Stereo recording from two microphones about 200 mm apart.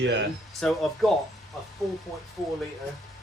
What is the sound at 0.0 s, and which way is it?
Speech, 60° right (ahead or behind).